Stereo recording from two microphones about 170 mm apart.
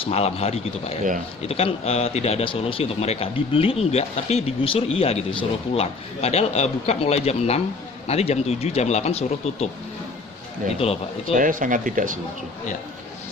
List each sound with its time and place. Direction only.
0.0 s speech: 40° left (ahead or behind)
10.8 s speech: 35° left (ahead or behind)
11.3 s speech: 50° right (ahead or behind)